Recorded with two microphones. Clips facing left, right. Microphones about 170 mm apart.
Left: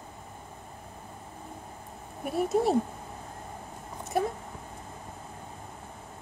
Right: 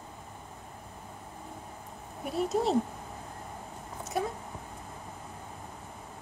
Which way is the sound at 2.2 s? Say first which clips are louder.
Left 3 dB; 55° left (ahead or behind).